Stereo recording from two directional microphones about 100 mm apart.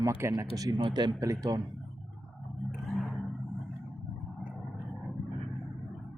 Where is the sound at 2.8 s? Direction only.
Centre (ahead or behind).